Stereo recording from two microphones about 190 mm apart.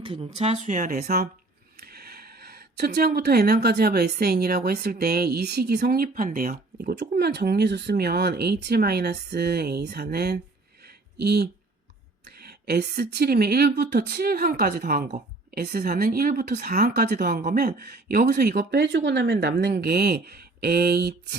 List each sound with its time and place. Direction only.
0.0 s speech: 25° right (ahead or behind); by 6.9 s 45° right (ahead or behind)
6.9 s speech: 60° right (ahead or behind)
10.8 s a sound: 60° right (ahead or behind)
12.2 s speech: 60° right (ahead or behind)